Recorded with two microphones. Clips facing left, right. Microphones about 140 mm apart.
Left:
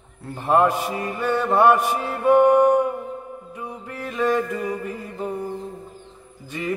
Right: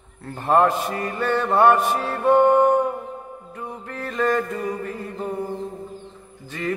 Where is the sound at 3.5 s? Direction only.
10° left (ahead or behind).